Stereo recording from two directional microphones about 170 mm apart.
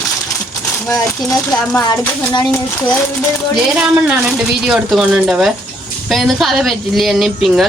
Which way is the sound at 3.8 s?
5° right (ahead or behind).